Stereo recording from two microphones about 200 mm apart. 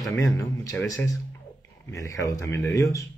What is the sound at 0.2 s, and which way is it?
Speech, 15° left (ahead or behind).